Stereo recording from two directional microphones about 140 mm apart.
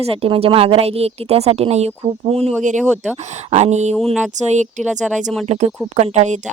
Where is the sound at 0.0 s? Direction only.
45° right (ahead or behind).